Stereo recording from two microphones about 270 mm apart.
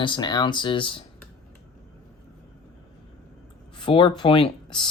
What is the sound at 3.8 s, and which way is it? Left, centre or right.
Speech, centre.